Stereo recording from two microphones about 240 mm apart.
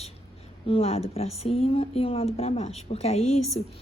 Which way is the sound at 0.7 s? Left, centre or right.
Left.